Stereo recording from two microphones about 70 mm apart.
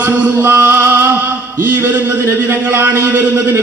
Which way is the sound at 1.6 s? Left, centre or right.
Right.